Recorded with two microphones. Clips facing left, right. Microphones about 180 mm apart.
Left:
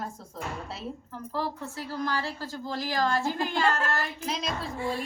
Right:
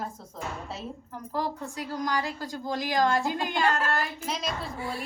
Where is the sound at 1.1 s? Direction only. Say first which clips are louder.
Right 2 dB; 15° right (ahead or behind).